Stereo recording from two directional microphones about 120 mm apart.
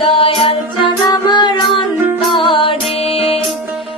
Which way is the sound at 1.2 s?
35° left (ahead or behind).